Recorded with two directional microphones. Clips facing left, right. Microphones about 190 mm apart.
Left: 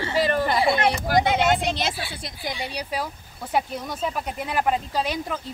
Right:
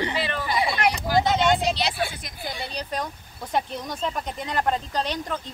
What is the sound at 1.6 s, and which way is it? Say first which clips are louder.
Speech: right 1 dB; 50° left (ahead or behind).